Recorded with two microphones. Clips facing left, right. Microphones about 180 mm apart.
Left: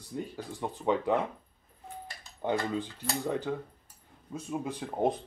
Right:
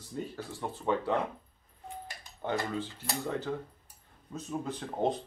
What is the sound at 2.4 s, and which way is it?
Speech, 15° left (ahead or behind).